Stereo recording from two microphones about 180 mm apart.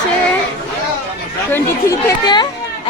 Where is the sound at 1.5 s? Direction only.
15° left (ahead or behind).